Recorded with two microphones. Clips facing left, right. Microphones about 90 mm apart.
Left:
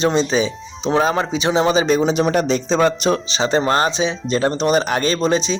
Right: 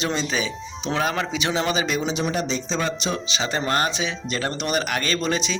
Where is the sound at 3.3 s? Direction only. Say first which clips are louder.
Left 7 dB; 35° left (ahead or behind).